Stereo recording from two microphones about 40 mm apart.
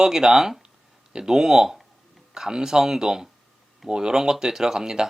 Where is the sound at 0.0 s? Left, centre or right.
Centre.